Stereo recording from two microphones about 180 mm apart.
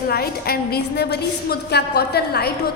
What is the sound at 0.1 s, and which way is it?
A woman's voice, 60° left (ahead or behind).